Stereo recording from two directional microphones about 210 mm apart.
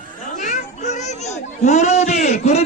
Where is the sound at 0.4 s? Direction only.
35° left (ahead or behind).